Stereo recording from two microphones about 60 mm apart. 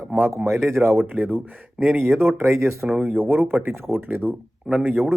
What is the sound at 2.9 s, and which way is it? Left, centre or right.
Speech, right.